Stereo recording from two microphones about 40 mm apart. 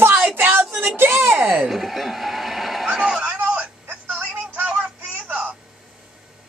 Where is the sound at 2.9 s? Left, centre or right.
Right.